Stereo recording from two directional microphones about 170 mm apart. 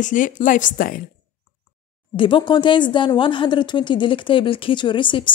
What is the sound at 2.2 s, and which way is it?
A woman's voice, 30° left (ahead or behind).